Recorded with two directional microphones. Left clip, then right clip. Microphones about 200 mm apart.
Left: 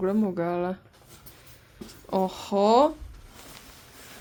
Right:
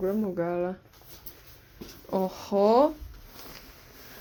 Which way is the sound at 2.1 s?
10° left (ahead or behind).